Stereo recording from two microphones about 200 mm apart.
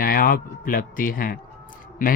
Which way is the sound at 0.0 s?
45° left (ahead or behind).